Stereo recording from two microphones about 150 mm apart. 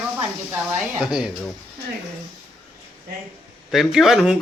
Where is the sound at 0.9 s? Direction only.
5° right (ahead or behind).